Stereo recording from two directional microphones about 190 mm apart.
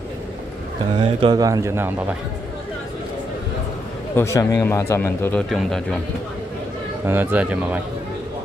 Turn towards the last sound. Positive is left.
turn(degrees=-5)  # may be behind; listen again after turning